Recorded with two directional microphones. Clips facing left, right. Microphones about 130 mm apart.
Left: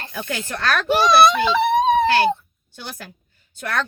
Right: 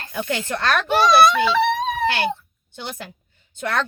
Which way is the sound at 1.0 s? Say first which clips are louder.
Even; 20° left (ahead or behind).